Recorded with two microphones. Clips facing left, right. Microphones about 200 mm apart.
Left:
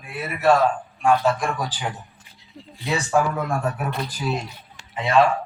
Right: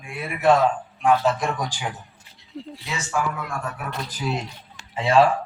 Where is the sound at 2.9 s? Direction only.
35° left (ahead or behind).